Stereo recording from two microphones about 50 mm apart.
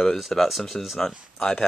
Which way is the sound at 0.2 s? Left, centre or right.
Centre.